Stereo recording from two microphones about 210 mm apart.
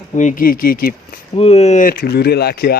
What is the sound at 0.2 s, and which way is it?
Speech, 40° left (ahead or behind).